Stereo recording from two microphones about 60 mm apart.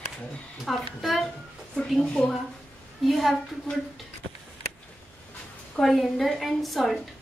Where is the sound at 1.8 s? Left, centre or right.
Left.